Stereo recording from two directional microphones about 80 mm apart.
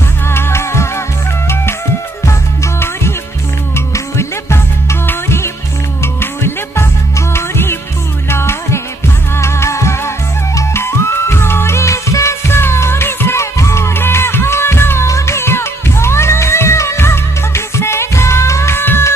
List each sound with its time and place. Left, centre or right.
0.3 s music: left
2.2 s music: left